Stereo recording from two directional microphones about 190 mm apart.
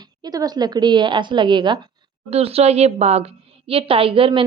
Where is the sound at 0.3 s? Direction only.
20° right (ahead or behind).